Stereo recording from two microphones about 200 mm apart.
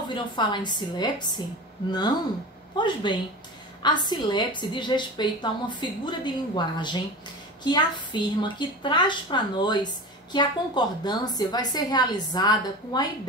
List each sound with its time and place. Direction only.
0.1 s a woman's voice: 25° left (ahead or behind)